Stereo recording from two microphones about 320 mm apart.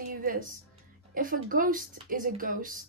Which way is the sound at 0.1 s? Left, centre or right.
Right.